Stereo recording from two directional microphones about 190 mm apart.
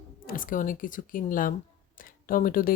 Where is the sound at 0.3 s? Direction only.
45° left (ahead or behind).